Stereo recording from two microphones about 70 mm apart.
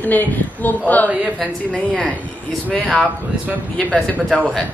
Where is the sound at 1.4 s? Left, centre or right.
Centre.